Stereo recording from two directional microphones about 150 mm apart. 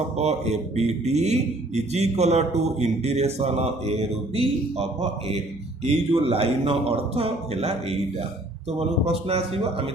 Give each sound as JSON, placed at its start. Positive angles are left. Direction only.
{"t": 0.2, "sound": "a man's voice", "side_deg": -45}
{"t": 9.0, "sound": "speech", "side_deg": -45}